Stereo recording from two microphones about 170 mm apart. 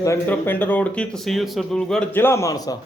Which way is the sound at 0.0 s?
15° left (ahead or behind).